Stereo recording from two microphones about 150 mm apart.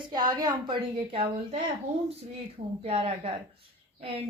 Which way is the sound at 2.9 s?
40° right (ahead or behind).